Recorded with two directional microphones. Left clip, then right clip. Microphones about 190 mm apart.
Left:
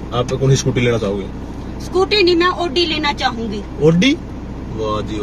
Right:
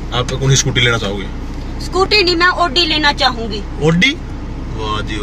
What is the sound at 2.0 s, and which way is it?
Speech, centre (ahead or behind).